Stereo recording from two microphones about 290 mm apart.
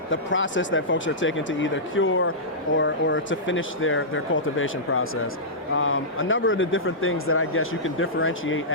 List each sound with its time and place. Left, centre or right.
0.1 s speech: left